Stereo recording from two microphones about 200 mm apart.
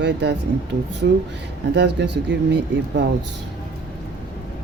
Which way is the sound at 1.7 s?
60° right (ahead or behind).